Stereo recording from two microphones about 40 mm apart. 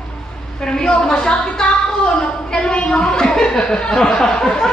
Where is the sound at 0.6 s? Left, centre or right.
Centre.